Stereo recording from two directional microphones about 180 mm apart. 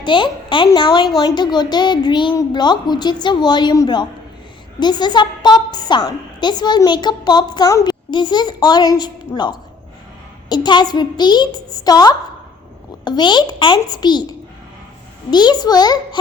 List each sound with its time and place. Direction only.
0.0 s a woman's voice: 25° left (ahead or behind)
15.3 s a woman's voice: 25° left (ahead or behind)